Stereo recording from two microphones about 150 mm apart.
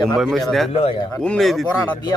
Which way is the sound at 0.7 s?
40° left (ahead or behind).